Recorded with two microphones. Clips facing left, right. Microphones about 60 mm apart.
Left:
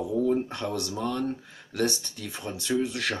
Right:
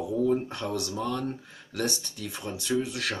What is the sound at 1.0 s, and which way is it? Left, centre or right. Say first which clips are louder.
Speech: left 1 dB; left.